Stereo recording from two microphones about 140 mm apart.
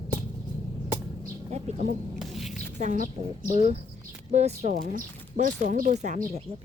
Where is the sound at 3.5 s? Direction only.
50° right (ahead or behind).